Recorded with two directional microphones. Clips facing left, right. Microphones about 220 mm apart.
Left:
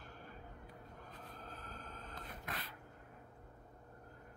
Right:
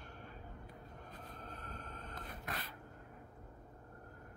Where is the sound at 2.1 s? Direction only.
45° right (ahead or behind).